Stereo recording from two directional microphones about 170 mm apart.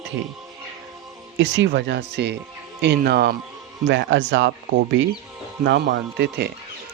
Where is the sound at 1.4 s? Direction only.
90° right; by 3.3 s 65° right (ahead or behind).